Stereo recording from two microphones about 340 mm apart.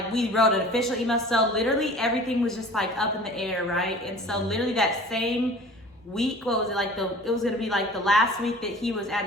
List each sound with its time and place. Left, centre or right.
0.1 s a woman's voice: centre